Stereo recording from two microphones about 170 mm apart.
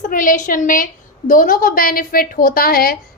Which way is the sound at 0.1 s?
50° left (ahead or behind).